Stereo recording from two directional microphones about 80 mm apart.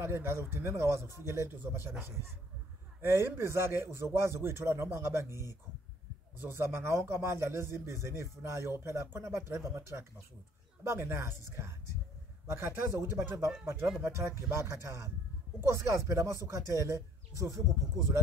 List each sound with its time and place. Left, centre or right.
0.0 s a man's voice: right
3.0 s a man's voice: right
6.4 s a man's voice: right